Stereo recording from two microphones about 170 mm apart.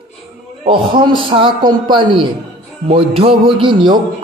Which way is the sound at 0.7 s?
30° right (ahead or behind).